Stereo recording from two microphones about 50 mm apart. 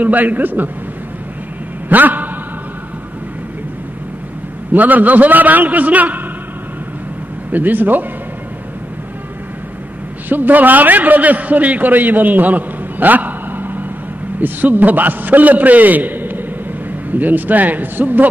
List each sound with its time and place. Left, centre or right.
0.0 s a man's voice: right
1.9 s a man's voice: right
4.7 s a man's voice: right
7.5 s a man's voice: right
10.3 s a man's voice: right